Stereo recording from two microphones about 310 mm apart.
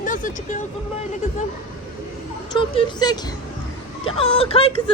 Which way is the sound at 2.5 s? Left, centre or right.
Centre.